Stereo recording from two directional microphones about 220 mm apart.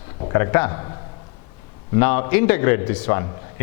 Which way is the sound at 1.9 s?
10° left (ahead or behind).